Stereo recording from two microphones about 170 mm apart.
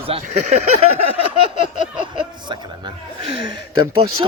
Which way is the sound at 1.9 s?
30° right (ahead or behind).